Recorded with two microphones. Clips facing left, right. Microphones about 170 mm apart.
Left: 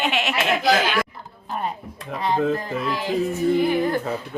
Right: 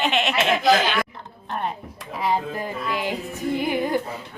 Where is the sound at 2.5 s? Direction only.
15° right (ahead or behind).